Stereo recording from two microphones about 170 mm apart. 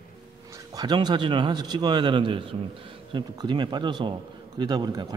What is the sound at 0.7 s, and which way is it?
A man's voice, 25° right (ahead or behind).